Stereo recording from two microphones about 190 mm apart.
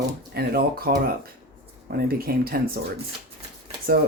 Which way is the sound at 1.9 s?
55° right (ahead or behind).